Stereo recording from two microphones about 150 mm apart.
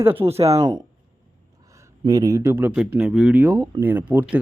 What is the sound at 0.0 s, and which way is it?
Speech, 15° right (ahead or behind).